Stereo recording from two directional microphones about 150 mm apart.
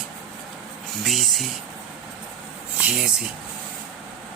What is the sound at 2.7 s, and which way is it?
Speech, 10° right (ahead or behind).